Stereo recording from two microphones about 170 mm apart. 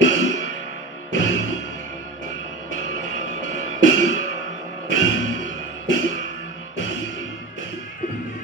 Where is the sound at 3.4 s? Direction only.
90° left.